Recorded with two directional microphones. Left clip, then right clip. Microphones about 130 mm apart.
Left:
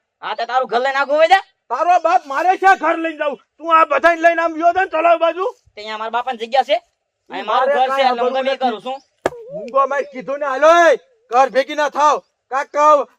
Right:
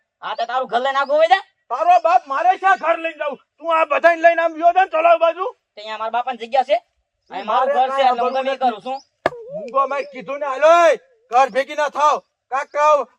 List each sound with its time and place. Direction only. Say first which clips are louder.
0.2 s a man's voice: left 3 dB; 40° left (ahead or behind)
2.5 s a man's voice: left 3 dB; 50° left (ahead or behind)